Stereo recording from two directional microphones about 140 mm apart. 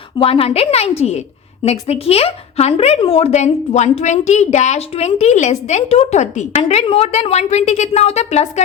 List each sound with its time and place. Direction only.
0.2 s speech: 40° left (ahead or behind)